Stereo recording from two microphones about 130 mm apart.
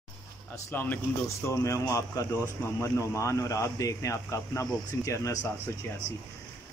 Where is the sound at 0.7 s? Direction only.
20° left (ahead or behind).